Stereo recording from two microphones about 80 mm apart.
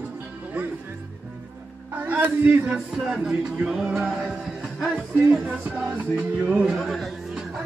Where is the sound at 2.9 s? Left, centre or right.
Centre.